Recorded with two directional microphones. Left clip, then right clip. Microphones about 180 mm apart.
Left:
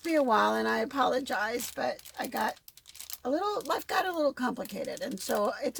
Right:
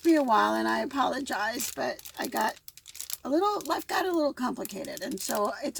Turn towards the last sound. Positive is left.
turn(degrees=35)  # may be behind; listen again after turning